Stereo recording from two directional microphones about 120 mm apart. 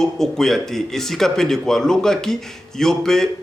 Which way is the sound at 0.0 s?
5° left (ahead or behind).